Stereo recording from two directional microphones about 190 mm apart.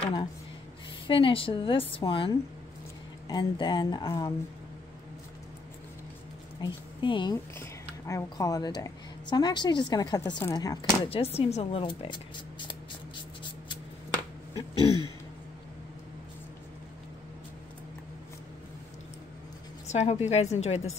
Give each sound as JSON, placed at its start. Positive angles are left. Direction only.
{"t": 0.0, "sound": "a woman's voice", "side_deg": 25}
{"t": 6.6, "sound": "a woman's voice", "side_deg": 25}
{"t": 11.1, "sound": "a sound", "side_deg": 30}
{"t": 14.9, "sound": "throat clearing", "side_deg": -20}
{"t": 19.9, "sound": "a woman's voice", "side_deg": 35}